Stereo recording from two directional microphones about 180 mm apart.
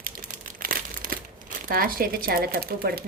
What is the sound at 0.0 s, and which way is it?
A woman's voice, 50° right (ahead or behind).